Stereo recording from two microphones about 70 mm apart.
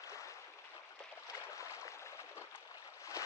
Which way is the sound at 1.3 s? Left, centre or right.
Left.